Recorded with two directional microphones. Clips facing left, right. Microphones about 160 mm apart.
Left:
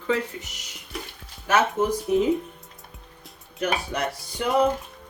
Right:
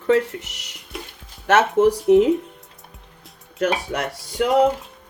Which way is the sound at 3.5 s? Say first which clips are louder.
Right 4 dB; 80° right.